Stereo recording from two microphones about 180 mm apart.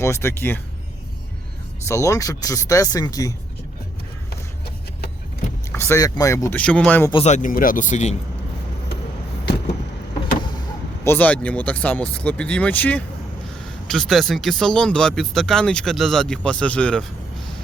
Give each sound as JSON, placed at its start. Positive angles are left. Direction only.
{"t": 0.0, "sound": "speech", "side_deg": 15}
{"t": 1.9, "sound": "speech", "side_deg": 15}
{"t": 5.7, "sound": "speech", "side_deg": 15}
{"t": 7.3, "sound": "speech", "side_deg": 45}
{"t": 11.0, "sound": "speech", "side_deg": 10}